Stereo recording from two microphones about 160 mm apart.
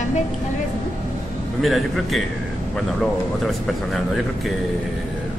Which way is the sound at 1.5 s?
Centre (ahead or behind).